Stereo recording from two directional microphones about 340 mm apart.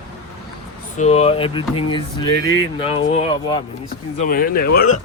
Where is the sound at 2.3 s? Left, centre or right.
Left.